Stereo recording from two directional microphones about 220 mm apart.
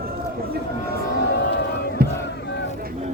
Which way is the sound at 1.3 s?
50° left (ahead or behind).